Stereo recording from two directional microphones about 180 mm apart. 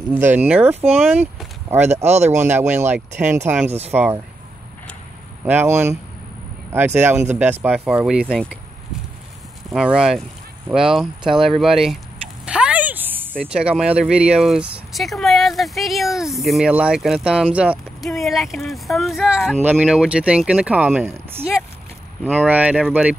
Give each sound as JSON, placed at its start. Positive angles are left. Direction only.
{"t": 0.1, "sound": "speech", "side_deg": -10}
{"t": 2.0, "sound": "speech", "side_deg": -40}
{"t": 2.3, "sound": "speech", "side_deg": -10}
{"t": 5.4, "sound": "speech", "side_deg": -10}
{"t": 7.0, "sound": "speech", "side_deg": -10}
{"t": 9.7, "sound": "speech", "side_deg": -5}
{"t": 12.4, "sound": "a sound", "side_deg": -5}
{"t": 13.9, "sound": "speech", "side_deg": -5}